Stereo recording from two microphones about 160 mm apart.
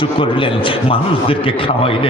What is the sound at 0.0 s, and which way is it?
A man's voice, 30° left (ahead or behind).